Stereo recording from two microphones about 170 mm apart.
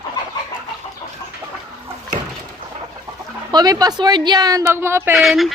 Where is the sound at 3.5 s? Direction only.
20° right (ahead or behind).